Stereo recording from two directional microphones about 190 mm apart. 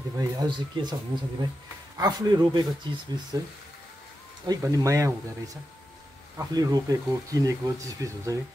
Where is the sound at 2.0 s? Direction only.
20° right (ahead or behind).